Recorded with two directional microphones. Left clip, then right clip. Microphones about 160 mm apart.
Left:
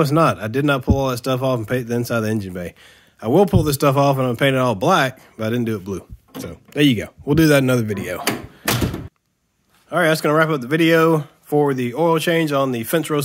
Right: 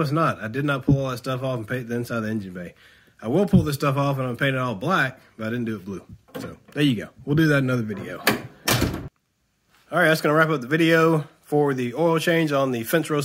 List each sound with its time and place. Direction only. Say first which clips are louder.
0.0 s a man's voice: left 6 dB; 40° left (ahead or behind)
3.2 s a man's voice: left 7 dB; 30° left (ahead or behind)
6.4 s a man's voice: left 6 dB; 25° left (ahead or behind); by 8.2 s 50° left (ahead or behind)
9.8 s speech: left 2 dB; 15° left (ahead or behind)